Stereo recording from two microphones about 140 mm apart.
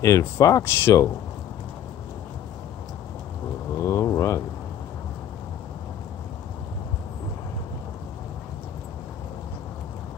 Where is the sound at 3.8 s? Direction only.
20° left (ahead or behind).